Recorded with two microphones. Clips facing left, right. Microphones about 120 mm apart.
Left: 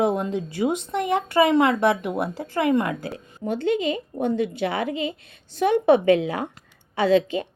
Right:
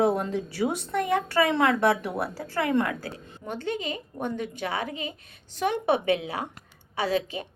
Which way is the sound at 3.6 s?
40° right (ahead or behind).